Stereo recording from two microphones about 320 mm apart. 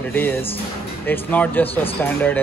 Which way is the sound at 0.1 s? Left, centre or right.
Centre.